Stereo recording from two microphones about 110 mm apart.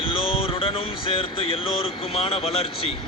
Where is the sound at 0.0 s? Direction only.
55° left (ahead or behind).